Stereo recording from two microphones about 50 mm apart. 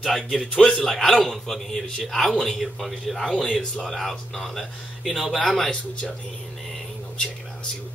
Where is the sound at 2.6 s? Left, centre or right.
Centre.